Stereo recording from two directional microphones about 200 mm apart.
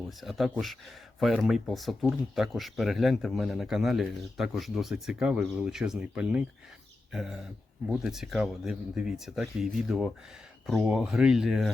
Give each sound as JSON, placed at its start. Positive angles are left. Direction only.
{"t": 0.2, "sound": "speech", "side_deg": 0}